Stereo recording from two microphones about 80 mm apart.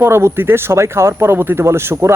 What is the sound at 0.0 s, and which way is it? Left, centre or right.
Speech, right.